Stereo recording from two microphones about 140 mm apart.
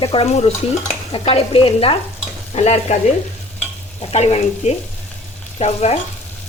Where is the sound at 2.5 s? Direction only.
50° left (ahead or behind).